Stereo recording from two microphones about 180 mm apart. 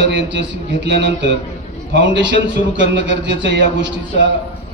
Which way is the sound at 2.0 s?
90° right.